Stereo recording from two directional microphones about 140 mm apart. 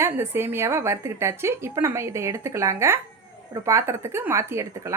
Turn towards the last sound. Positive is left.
turn(degrees=-20)  # may be behind; listen again after turning